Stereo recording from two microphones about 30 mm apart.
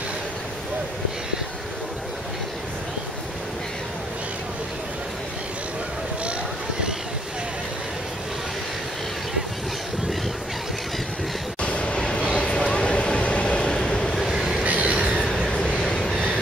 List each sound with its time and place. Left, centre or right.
11.6 s vehicle: left
12.0 s vehicle: left
13.7 s train: left
14.2 s train: centre
14.6 s train: right
14.9 s a sound: right
15.2 s vehicle: centre
15.5 s a sound: left
15.8 s train: centre